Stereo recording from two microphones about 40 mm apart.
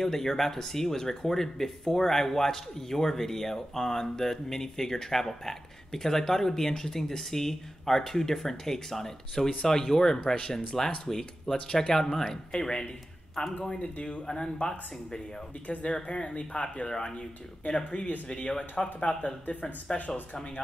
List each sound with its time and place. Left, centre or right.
0.0 s speech: centre
12.3 s speech: left
14.2 s speech: centre
15.6 s speech: left
17.6 s speech: left
19.2 s speech: left
19.9 s speech: centre